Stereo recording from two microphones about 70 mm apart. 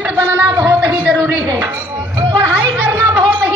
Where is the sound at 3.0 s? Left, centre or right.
Right.